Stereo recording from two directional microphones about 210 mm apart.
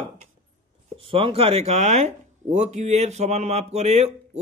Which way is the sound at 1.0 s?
25° right (ahead or behind).